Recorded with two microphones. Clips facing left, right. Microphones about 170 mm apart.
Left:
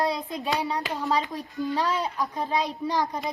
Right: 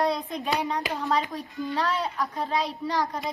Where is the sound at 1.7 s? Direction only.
15° left (ahead or behind).